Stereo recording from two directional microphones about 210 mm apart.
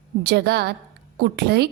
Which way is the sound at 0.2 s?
50° right (ahead or behind).